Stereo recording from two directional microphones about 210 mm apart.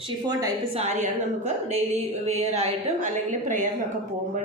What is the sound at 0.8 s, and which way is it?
A woman's voice, 35° right (ahead or behind).